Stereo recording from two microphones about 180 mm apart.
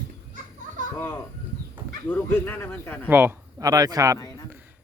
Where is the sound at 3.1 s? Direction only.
10° right (ahead or behind).